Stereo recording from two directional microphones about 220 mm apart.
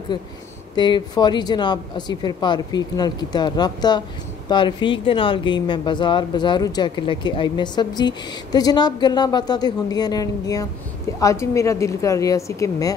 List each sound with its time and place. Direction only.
0.1 s a woman's voice: 20° left (ahead or behind)